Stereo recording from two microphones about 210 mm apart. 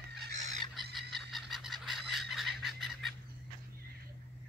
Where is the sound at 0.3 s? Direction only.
35° right (ahead or behind).